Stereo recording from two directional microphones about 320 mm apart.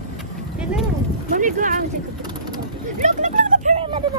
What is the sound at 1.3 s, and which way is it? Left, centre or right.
Boat, right.